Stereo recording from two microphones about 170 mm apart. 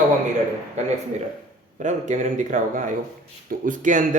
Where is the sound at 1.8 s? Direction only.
45° right (ahead or behind).